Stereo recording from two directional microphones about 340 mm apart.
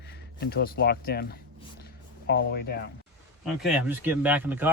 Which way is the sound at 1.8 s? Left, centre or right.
Left.